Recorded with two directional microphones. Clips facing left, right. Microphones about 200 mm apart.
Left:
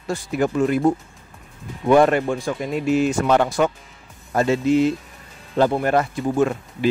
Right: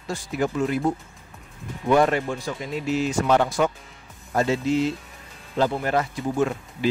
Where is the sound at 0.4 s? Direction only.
55° left (ahead or behind).